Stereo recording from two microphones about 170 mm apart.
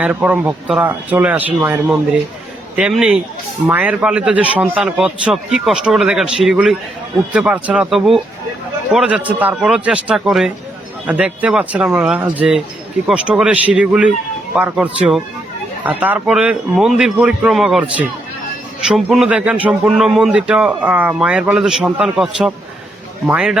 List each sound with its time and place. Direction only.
0.0 s speech: 10° right (ahead or behind)